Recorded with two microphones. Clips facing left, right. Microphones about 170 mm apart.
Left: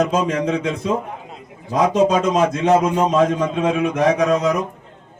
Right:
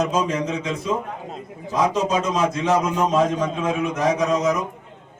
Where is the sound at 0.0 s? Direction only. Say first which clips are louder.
Left 3 dB; 55° left (ahead or behind).